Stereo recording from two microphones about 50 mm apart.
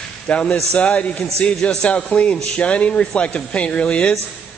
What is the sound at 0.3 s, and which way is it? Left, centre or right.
A man's voice, left.